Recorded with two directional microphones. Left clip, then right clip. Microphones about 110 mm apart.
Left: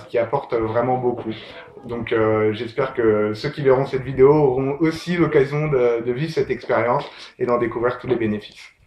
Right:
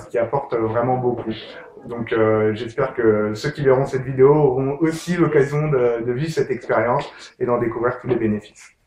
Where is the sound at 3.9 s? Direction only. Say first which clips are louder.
Even; 25° left (ahead or behind).